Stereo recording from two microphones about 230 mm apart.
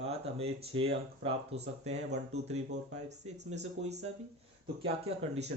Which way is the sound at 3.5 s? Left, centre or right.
Right.